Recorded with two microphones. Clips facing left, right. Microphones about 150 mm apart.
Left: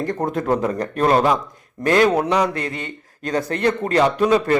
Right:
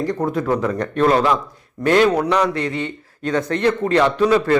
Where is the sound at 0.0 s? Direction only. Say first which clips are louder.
Right 2 dB; 50° left (ahead or behind).